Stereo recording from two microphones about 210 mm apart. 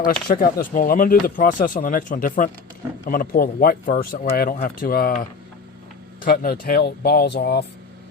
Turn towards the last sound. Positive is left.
turn(degrees=50)  # may be behind; listen again after turning